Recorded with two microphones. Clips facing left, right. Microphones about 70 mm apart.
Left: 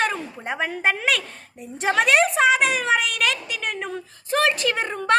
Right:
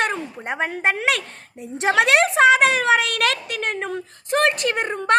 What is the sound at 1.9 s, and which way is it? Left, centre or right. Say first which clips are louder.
A woman's voice: right 2 dB; right.